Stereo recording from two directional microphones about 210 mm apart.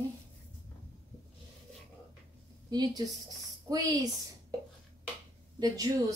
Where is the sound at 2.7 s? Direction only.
20° right (ahead or behind).